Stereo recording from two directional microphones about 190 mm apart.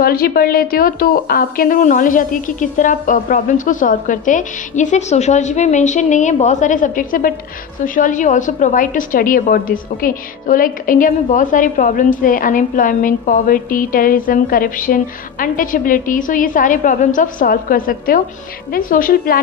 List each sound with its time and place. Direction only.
0.0 s a woman's voice: 50° left (ahead or behind)